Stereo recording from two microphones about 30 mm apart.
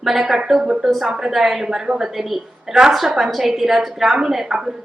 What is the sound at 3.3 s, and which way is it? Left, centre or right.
A woman's voice, centre.